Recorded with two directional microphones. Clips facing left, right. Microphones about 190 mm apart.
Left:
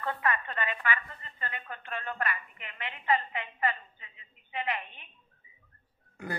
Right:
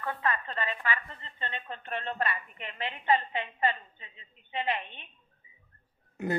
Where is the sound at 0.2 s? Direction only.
30° right (ahead or behind).